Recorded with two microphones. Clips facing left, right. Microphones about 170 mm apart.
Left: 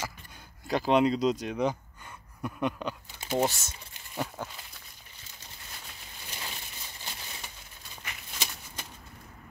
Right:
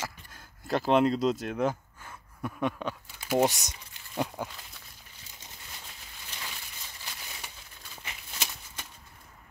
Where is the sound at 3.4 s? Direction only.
15° right (ahead or behind).